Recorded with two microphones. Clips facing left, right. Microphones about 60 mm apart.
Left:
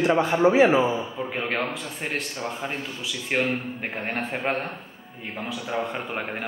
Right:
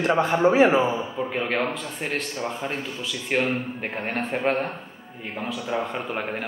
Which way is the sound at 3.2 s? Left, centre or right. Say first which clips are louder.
Right 1 dB; centre.